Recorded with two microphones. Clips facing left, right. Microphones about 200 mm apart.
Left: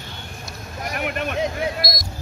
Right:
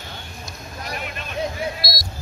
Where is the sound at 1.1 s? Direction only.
60° left (ahead or behind).